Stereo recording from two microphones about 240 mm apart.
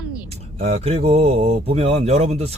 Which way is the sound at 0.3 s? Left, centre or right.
Right.